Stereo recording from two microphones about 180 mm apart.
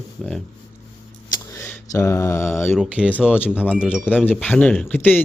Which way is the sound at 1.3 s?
20° left (ahead or behind).